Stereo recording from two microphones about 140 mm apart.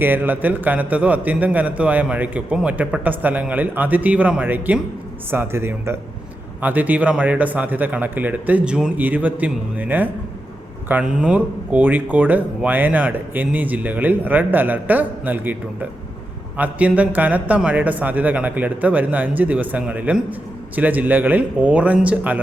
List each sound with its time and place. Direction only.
0.0 s speech: 15° right (ahead or behind)